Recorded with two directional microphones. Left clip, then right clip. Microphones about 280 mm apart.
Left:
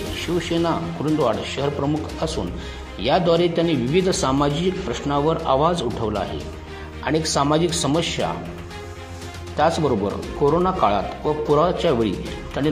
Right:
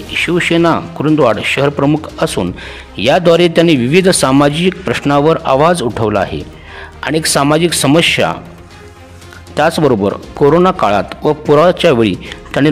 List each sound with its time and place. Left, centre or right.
0.3 s a man's voice: right
9.6 s a man's voice: right